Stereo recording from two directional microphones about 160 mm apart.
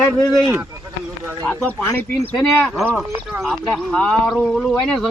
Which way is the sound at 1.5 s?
10° left (ahead or behind).